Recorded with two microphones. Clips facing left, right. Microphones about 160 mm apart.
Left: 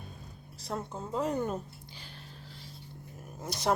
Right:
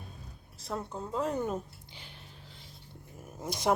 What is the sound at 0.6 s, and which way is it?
Speech, centre (ahead or behind).